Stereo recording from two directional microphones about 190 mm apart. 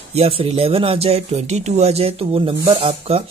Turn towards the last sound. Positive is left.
turn(degrees=-30)  # may be behind; listen again after turning